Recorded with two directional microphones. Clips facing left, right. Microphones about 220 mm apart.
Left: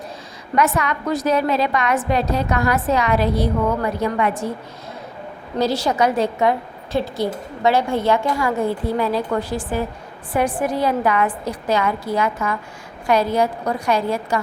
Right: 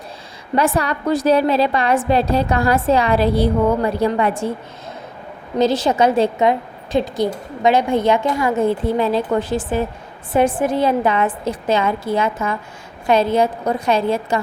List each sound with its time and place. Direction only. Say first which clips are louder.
0.5 s a woman's voice: right 2 dB; 30° right (ahead or behind)
5.5 s a woman's voice: right 3 dB; 20° right (ahead or behind)